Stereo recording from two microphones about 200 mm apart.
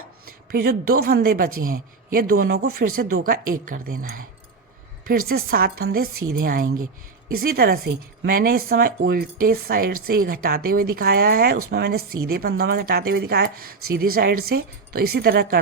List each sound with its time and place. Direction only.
0.5 s speech: 50° right (ahead or behind)
5.3 s speech: 50° right (ahead or behind)